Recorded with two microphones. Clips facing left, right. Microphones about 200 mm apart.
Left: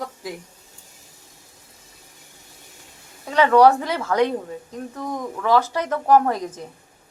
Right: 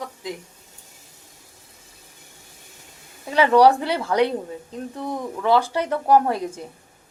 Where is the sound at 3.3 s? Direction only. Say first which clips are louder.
Left 1 dB; 10° right (ahead or behind).